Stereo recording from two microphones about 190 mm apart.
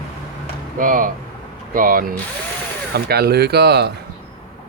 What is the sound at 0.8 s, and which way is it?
Speech, 45° right (ahead or behind).